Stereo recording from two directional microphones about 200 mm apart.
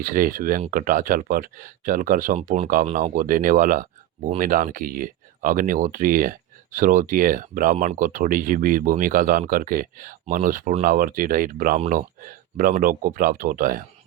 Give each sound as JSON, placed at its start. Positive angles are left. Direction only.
{"t": 0.0, "sound": "speech", "side_deg": -45}